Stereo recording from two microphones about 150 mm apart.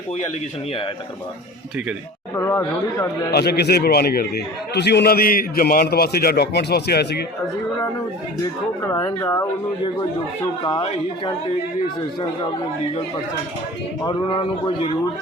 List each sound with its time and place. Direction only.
2.3 s speech: 20° left (ahead or behind)
3.3 s a man's voice: 90° left
8.8 s speech: 20° left (ahead or behind)
14.0 s speech: 25° left (ahead or behind)